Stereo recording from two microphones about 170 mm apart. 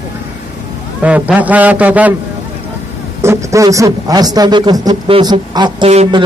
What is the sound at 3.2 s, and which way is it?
A man's voice, 15° right (ahead or behind).